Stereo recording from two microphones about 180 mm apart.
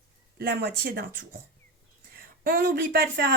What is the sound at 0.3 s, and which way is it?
Speech, 65° right (ahead or behind).